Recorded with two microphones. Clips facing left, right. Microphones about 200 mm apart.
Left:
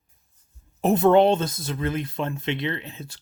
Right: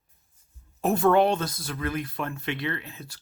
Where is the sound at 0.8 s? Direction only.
20° left (ahead or behind).